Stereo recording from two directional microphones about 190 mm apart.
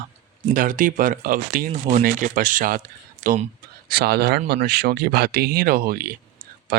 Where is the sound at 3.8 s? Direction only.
55° right (ahead or behind).